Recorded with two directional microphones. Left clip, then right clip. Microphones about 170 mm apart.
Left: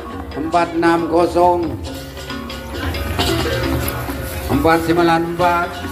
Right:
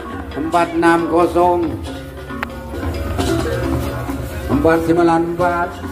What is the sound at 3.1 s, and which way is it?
Music, 90° right.